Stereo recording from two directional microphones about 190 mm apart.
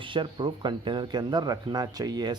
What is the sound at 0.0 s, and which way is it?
Speech, 25° right (ahead or behind).